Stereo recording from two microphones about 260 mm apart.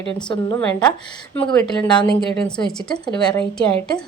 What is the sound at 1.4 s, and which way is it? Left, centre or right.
Speech, centre.